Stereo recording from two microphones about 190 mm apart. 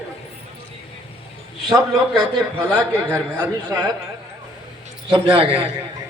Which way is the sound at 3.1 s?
10° right (ahead or behind).